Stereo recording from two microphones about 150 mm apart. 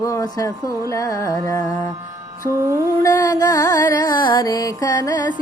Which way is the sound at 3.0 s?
25° left (ahead or behind).